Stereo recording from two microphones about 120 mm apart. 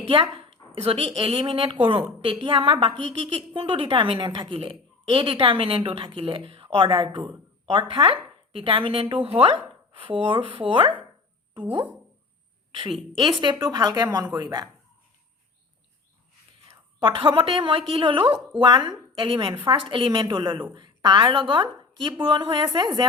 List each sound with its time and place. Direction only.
0.1 s a woman's voice: 50° right (ahead or behind)
13.4 s a woman's voice: 40° right (ahead or behind)
17.0 s a woman's voice: 45° right (ahead or behind)